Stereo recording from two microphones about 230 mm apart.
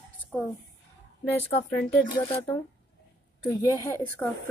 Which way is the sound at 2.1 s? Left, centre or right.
Left.